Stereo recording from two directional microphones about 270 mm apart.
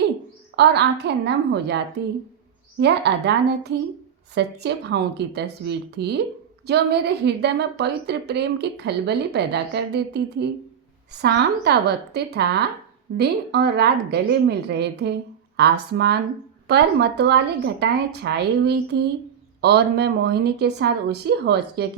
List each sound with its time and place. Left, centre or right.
0.5 s a woman's voice: right